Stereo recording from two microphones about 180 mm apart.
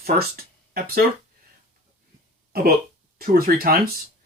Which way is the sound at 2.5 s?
55° right (ahead or behind).